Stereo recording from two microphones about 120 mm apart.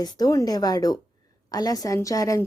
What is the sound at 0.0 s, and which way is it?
Speech, 35° left (ahead or behind).